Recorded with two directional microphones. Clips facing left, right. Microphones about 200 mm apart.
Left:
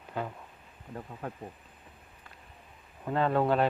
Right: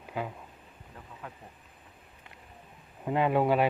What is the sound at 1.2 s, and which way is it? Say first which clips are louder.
Speech: left 6 dB; 40° left (ahead or behind).